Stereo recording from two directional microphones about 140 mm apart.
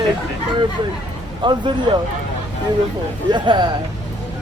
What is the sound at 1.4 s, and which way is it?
Speech, 35° right (ahead or behind).